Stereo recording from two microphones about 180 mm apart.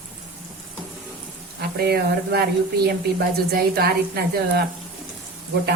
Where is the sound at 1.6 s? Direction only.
60° right (ahead or behind).